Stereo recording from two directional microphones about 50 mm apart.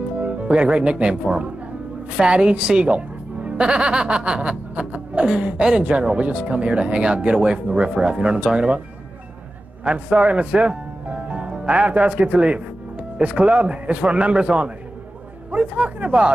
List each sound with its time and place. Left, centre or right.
0.2 s speech: right
9.8 s speech: right